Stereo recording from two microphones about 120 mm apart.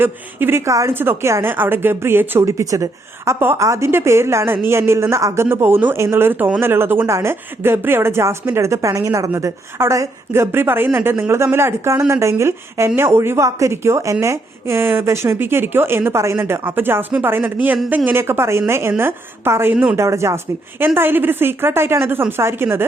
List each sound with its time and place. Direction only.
0.0 s a woman's voice: 20° right (ahead or behind)
19.7 s speech: 10° right (ahead or behind)
20.0 s a woman's voice: 25° right (ahead or behind)